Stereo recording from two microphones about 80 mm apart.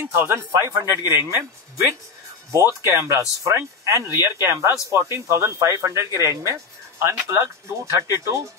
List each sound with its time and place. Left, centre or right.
0.0 s speech: right
2.8 s speech: right